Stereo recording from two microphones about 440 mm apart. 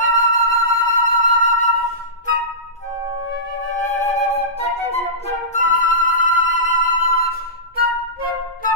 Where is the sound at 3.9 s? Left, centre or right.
Centre.